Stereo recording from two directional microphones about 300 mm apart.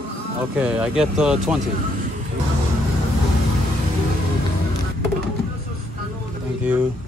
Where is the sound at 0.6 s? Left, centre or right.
Centre.